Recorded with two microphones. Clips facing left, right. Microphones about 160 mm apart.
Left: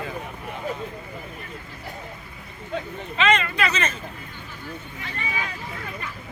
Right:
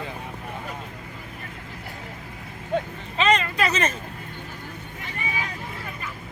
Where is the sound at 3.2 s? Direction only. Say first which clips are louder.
Even; 35° right (ahead or behind).